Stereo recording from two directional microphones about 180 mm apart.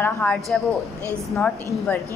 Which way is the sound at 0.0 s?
10° left (ahead or behind).